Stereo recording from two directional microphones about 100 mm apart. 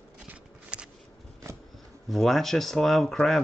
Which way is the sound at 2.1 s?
Centre (ahead or behind).